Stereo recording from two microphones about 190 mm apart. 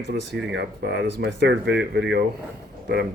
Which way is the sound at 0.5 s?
65° right (ahead or behind).